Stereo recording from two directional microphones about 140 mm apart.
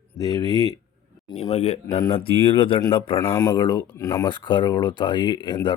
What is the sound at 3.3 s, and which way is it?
Speech, 25° left (ahead or behind).